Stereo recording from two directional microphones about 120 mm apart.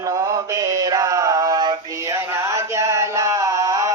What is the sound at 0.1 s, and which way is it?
Mantra, 25° right (ahead or behind).